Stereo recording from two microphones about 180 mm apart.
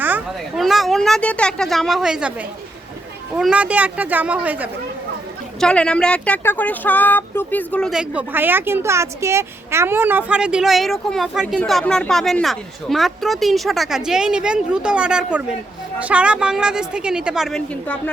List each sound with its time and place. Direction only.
0.0 s a sound: 10° right (ahead or behind)
0.6 s speech: centre (ahead or behind)
3.3 s speech: 5° right (ahead or behind)
5.5 s speech: 5° left (ahead or behind)